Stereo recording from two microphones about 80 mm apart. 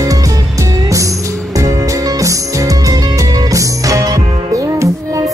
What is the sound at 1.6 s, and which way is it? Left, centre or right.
Music, right.